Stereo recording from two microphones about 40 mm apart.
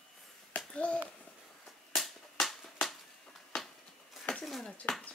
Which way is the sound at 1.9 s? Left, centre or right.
Centre.